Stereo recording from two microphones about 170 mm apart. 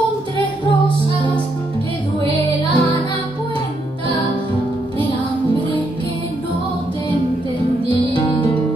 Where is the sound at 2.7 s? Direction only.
25° left (ahead or behind).